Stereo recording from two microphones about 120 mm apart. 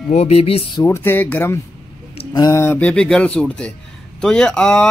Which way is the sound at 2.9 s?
5° left (ahead or behind).